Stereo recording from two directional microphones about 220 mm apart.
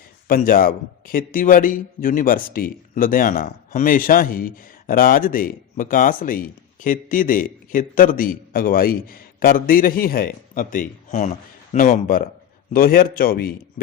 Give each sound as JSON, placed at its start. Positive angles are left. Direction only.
{"t": 0.3, "sound": "speech", "side_deg": 40}